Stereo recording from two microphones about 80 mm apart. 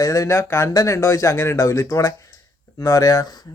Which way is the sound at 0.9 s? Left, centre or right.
Left.